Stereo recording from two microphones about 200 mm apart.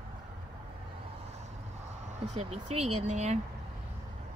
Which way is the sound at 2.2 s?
30° right (ahead or behind).